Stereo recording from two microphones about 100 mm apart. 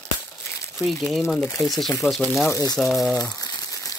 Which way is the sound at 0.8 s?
Centre (ahead or behind).